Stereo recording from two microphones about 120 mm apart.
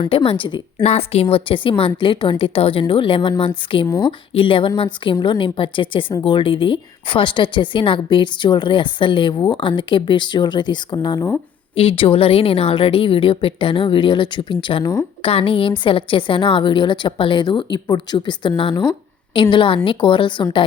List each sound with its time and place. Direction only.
0.1 s a woman's voice: 45° left (ahead or behind)
0.8 s a woman's voice: 60° left (ahead or behind)
3.8 s speech: 20° left (ahead or behind)
4.4 s a woman's voice: 45° left (ahead or behind)
11.8 s a woman's voice: 50° left (ahead or behind)